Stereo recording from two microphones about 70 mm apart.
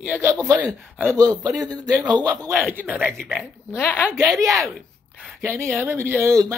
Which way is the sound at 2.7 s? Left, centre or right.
Right.